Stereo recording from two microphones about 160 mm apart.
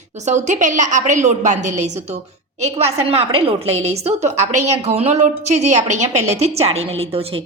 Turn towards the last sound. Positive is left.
turn(degrees=-40)  # may be behind; listen again after turning